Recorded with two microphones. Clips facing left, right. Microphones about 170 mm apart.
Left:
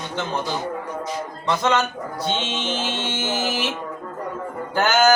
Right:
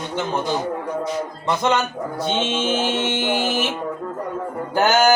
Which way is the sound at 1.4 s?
20° right (ahead or behind).